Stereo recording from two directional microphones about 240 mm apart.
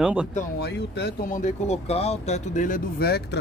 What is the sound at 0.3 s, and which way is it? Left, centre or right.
Speech, left.